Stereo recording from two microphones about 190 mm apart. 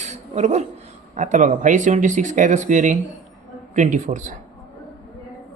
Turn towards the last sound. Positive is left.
turn(degrees=-40)  # may be behind; listen again after turning